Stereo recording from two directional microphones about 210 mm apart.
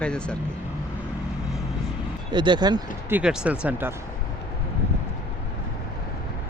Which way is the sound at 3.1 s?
5° right (ahead or behind).